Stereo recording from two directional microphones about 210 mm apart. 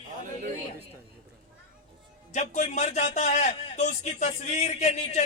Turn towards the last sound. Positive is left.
turn(degrees=30)  # may be behind; listen again after turning